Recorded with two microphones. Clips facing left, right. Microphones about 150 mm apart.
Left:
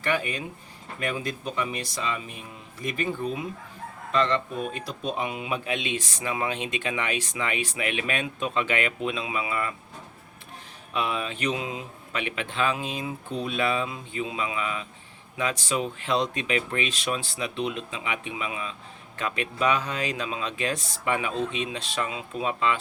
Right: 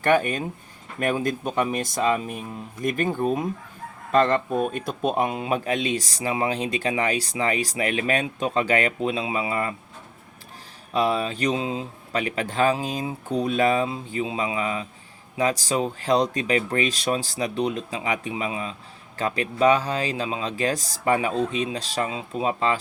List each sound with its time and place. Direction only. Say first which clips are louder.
0.0 s a man's voice: right 7 dB; 50° right (ahead or behind)
10.9 s a man's voice: right 6 dB; 35° right (ahead or behind)